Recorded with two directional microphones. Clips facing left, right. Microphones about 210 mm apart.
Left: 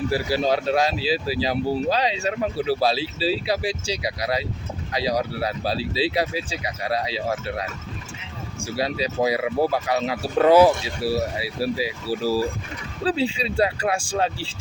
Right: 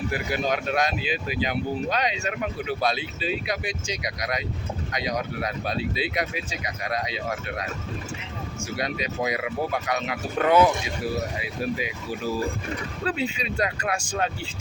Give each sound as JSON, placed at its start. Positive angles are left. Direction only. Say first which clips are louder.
{"t": 0.1, "sound": "speech", "louder": "left 4 dB", "side_deg": 30}
{"t": 8.7, "sound": "speech", "louder": "left 5 dB", "side_deg": 30}
{"t": 13.1, "sound": "speech", "louder": "left 5 dB", "side_deg": 30}